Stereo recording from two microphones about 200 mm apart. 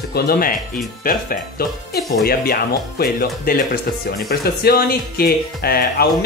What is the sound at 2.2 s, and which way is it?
Speech, 50° left (ahead or behind).